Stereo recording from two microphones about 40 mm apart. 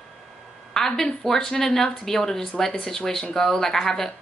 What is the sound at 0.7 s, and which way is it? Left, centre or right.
A woman's voice, centre.